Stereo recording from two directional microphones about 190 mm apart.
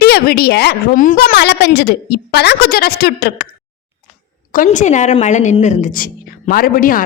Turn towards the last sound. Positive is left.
turn(degrees=45)  # may be behind; listen again after turning